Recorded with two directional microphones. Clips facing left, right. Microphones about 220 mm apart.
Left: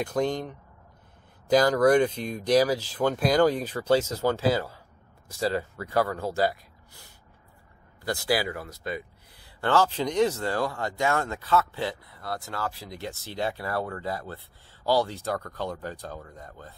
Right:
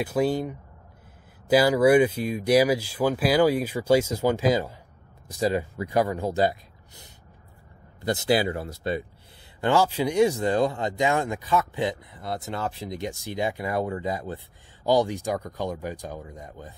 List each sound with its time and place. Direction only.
0.0 s speech: 5° right (ahead or behind); by 9.0 s 30° right (ahead or behind)
9.6 s speech: 10° right (ahead or behind)